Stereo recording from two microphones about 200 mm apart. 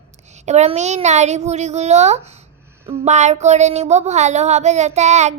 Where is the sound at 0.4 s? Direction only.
35° right (ahead or behind).